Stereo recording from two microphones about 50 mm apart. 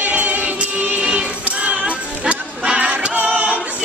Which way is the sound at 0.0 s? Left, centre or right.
Right.